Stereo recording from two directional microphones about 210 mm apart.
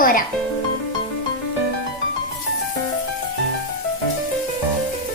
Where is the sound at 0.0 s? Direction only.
40° left (ahead or behind).